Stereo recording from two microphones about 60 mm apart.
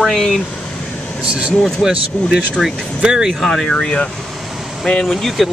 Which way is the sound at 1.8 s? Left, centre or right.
Centre.